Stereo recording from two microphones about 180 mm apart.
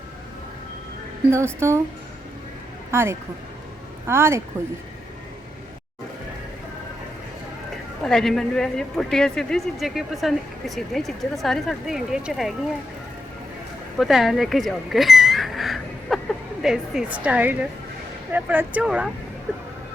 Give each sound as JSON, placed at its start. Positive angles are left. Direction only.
{"t": 1.3, "sound": "a woman's voice", "side_deg": -15}
{"t": 2.9, "sound": "a woman's voice", "side_deg": -15}
{"t": 8.0, "sound": "a woman's voice", "side_deg": 5}
{"t": 14.0, "sound": "a sound", "side_deg": 0}
{"t": 16.6, "sound": "a woman's voice", "side_deg": -5}